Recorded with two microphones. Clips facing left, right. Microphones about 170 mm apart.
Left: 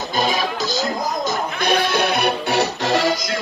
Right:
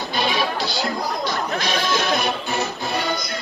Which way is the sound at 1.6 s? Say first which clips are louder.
Left 7 dB; 60° left (ahead or behind).